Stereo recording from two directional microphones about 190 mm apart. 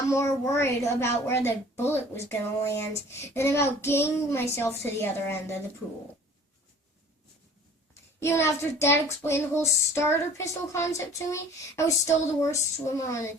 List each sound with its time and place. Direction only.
0.1 s child singing: 15° left (ahead or behind)
8.2 s child singing: 15° left (ahead or behind)